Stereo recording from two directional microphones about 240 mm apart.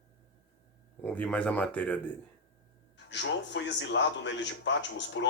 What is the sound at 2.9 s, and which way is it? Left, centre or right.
A man's voice, left.